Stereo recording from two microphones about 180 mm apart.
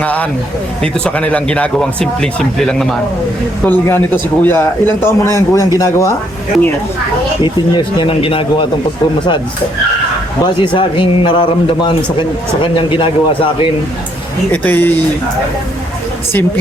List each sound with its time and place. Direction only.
0.0 s a man's voice: 10° left (ahead or behind)
7.4 s a man's voice: 25° left (ahead or behind)
10.4 s a man's voice: 25° left (ahead or behind)
14.5 s a man's voice: 10° left (ahead or behind)